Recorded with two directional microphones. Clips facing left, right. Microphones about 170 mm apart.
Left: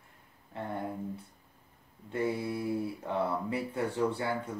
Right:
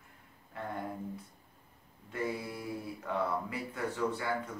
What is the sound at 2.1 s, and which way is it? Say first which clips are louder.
Speech: left 5 dB; 25° left (ahead or behind).